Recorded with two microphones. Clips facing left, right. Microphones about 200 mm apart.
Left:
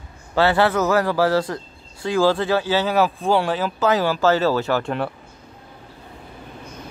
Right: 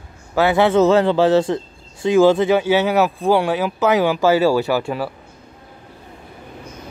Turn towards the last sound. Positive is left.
turn(degrees=-5)  # may be behind; listen again after turning